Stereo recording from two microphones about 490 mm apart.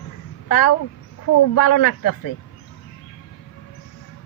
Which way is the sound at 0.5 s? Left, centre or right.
Left.